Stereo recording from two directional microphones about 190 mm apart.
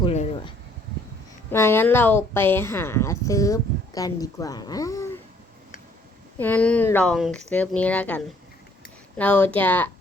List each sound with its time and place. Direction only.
0.0 s a sound: 30° left (ahead or behind)
1.5 s speech: 10° left (ahead or behind)
6.4 s speech: 10° left (ahead or behind)